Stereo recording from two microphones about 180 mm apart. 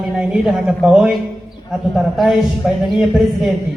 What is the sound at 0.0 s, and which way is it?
A man's voice, centre (ahead or behind).